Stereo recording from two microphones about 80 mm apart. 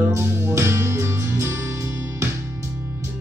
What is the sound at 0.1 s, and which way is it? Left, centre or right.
Music, right.